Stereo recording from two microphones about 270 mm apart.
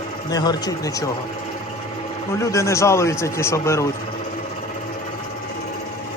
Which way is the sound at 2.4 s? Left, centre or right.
Centre.